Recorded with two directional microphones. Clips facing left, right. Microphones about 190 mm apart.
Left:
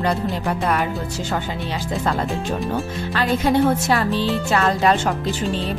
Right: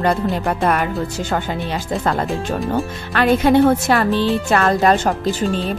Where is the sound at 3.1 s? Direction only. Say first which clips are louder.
Right 5 dB; 60° right (ahead or behind).